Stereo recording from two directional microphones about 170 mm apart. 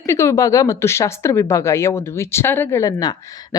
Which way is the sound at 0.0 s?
15° left (ahead or behind).